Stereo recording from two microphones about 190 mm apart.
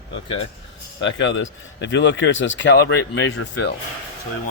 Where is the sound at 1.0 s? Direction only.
80° left.